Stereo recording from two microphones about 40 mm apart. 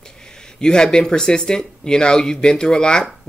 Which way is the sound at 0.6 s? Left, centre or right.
Centre.